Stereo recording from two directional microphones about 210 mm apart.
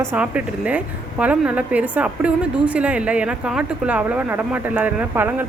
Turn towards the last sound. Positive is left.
turn(degrees=-10)  # may be behind; listen again after turning